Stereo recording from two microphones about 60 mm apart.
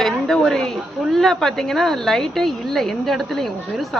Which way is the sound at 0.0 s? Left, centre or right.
Centre.